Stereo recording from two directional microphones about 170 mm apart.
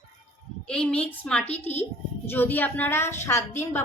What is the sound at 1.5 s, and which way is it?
Speech, 40° left (ahead or behind).